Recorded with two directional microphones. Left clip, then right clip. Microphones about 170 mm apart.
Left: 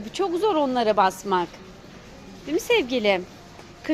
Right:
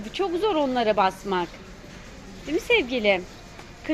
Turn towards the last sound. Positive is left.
turn(degrees=15)  # may be behind; listen again after turning